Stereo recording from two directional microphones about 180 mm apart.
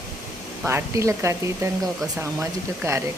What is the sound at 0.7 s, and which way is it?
Speech, 15° right (ahead or behind).